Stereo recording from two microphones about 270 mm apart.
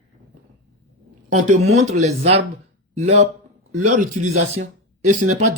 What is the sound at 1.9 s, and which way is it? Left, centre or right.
A man's voice, right.